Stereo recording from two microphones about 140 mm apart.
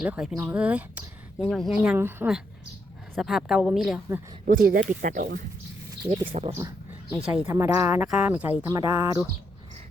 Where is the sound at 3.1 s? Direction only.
Centre (ahead or behind).